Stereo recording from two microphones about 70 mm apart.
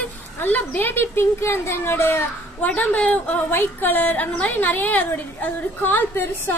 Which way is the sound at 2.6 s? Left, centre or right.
Left.